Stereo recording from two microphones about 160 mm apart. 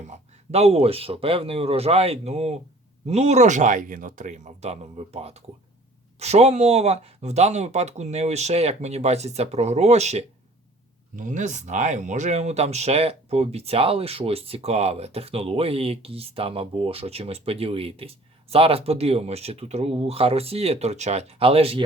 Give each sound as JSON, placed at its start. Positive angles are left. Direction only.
{"t": 0.0, "sound": "speech", "side_deg": -45}